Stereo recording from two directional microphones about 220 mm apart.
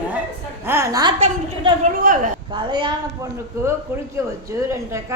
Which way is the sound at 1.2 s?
30° right (ahead or behind).